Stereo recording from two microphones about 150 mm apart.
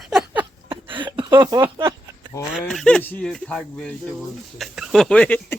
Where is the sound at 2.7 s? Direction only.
5° left (ahead or behind).